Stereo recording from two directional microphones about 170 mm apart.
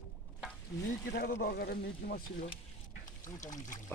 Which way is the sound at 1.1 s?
65° left (ahead or behind).